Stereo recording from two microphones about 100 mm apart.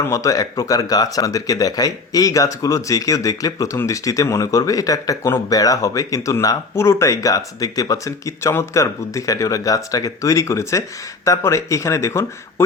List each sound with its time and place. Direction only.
0.0 s speech: 30° left (ahead or behind)